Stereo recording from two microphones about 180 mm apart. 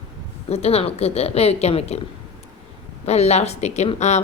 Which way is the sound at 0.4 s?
35° left (ahead or behind).